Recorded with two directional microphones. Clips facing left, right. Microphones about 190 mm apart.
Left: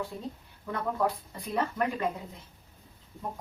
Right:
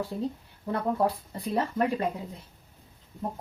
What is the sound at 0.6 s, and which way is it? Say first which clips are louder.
Speech: right 3 dB; 30° right (ahead or behind).